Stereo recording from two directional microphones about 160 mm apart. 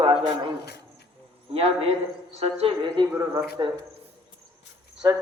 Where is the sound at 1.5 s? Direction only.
40° right (ahead or behind).